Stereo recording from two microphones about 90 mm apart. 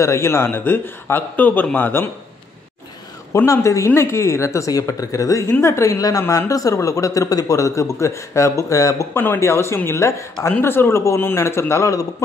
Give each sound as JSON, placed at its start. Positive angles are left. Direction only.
{"t": 0.0, "sound": "a man's voice", "side_deg": 30}
{"t": 3.4, "sound": "speech", "side_deg": 35}
{"t": 9.1, "sound": "a man's voice", "side_deg": 25}